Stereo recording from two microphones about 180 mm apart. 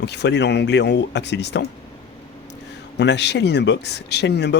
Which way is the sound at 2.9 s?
70° left (ahead or behind).